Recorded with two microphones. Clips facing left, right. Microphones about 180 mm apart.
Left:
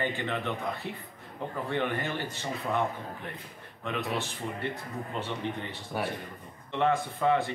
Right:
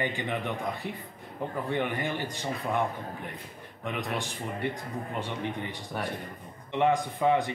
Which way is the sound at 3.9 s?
15° right (ahead or behind).